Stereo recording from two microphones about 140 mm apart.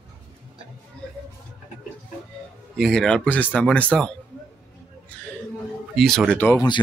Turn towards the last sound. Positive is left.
turn(degrees=15)  # may be behind; listen again after turning